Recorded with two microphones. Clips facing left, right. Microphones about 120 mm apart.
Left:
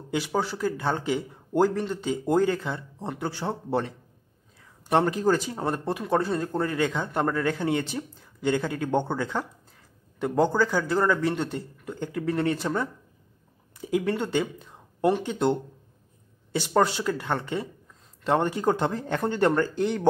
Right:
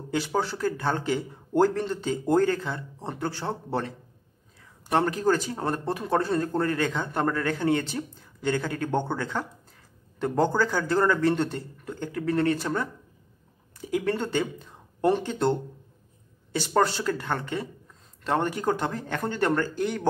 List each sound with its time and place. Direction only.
0.1 s speech: 10° left (ahead or behind)
4.9 s speech: 20° left (ahead or behind)
16.5 s speech: 15° left (ahead or behind)